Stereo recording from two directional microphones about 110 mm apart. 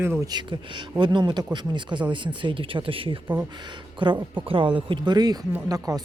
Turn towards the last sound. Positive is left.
turn(degrees=-35)  # may be behind; listen again after turning